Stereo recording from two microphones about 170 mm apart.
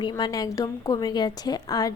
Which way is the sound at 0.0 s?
25° left (ahead or behind).